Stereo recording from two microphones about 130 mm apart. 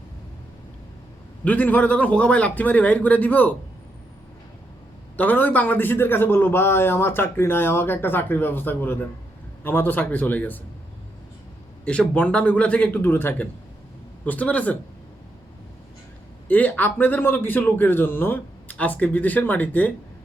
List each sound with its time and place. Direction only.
1.5 s a man's voice: 15° left (ahead or behind)
5.1 s a man's voice: 15° left (ahead or behind)
11.9 s a man's voice: 10° left (ahead or behind)
16.5 s a man's voice: 10° left (ahead or behind)